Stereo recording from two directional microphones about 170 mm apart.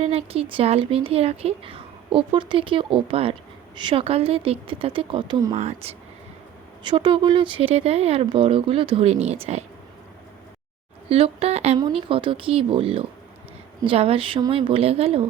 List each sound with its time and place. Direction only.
0.0 s speech: 35° right (ahead or behind)
5.5 s speech: 40° right (ahead or behind)
6.8 s speech: 30° right (ahead or behind)
11.1 s speech: 35° right (ahead or behind)